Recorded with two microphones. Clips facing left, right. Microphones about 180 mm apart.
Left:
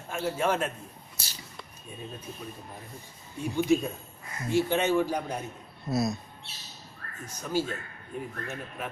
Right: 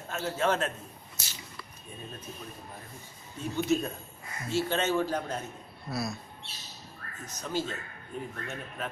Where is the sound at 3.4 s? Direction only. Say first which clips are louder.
Left 3 dB; 10° left (ahead or behind).